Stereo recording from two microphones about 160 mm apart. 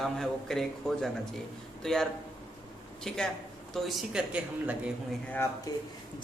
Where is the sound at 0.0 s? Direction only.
Centre (ahead or behind).